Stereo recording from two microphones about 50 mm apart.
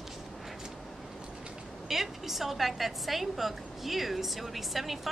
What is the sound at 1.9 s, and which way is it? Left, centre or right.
A woman's voice, centre.